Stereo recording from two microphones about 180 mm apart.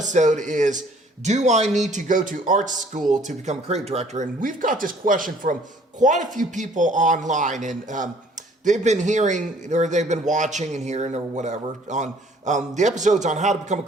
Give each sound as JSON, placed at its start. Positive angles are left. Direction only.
{"t": 0.0, "sound": "a man's voice", "side_deg": -45}